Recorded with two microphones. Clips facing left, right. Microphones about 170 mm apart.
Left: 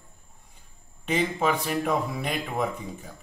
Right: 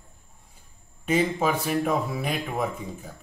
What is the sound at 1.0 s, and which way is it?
Speech, 5° right (ahead or behind).